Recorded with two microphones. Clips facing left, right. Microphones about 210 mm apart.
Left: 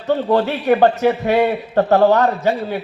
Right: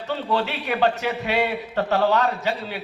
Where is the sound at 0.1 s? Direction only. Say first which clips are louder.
Left 8 dB; 50° left (ahead or behind).